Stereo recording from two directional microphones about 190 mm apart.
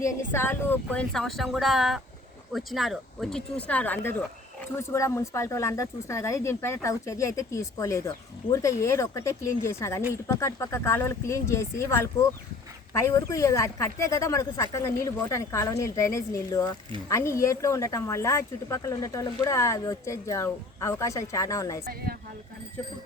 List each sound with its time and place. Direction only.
0.3 s speech: 10° left (ahead or behind)